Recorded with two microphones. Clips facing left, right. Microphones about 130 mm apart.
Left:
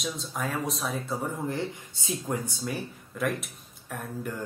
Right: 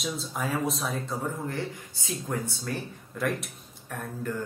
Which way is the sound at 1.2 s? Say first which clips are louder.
Left 1 dB; 20° left (ahead or behind).